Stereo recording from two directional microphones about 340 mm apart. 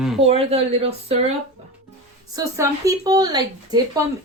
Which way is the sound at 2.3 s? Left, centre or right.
Centre.